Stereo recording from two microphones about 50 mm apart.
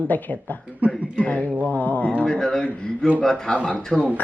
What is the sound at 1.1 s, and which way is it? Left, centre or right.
Speech, left.